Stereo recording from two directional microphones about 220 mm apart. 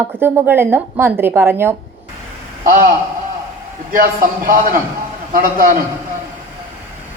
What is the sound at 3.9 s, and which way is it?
A man's voice, 40° right (ahead or behind).